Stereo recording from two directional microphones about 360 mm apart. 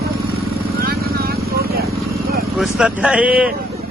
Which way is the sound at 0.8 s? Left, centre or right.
Right.